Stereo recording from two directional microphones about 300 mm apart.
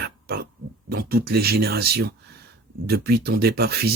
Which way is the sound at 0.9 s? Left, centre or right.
Right.